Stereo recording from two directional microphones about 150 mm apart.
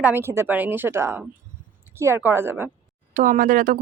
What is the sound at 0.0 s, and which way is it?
A woman's voice, 15° right (ahead or behind).